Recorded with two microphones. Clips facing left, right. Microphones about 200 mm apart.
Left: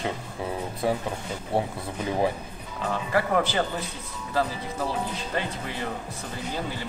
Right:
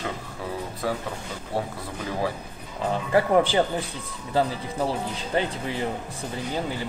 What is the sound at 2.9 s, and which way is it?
Speech, 25° right (ahead or behind).